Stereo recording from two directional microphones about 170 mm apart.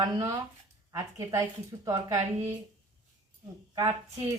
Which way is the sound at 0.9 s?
20° right (ahead or behind).